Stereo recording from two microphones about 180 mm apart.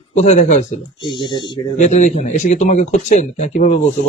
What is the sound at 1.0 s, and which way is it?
Speech, 25° left (ahead or behind).